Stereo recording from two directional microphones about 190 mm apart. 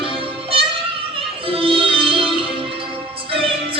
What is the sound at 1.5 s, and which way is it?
Music, 30° right (ahead or behind).